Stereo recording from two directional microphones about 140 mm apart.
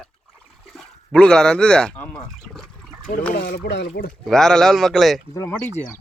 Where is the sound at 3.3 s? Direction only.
90° left.